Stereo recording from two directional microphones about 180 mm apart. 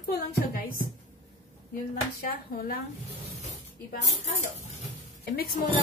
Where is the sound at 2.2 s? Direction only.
55° left (ahead or behind).